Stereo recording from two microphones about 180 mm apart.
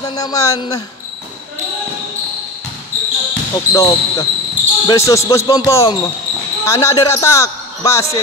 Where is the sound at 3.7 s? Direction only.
20° left (ahead or behind).